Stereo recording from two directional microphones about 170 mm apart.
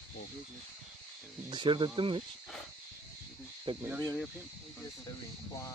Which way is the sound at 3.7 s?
30° right (ahead or behind).